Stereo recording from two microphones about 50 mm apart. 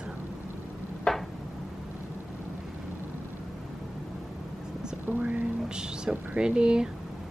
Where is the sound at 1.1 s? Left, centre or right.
Centre.